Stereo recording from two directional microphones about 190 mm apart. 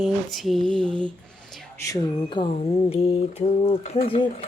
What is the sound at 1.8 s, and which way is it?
Mantra, 20° left (ahead or behind).